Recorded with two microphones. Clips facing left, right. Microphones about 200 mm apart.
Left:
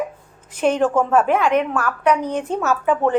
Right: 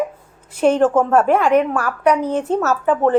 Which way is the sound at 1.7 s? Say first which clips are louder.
Right 2 dB; 10° right (ahead or behind).